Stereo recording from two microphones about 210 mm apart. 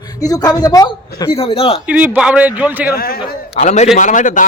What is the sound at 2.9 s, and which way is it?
Speech, 45° left (ahead or behind).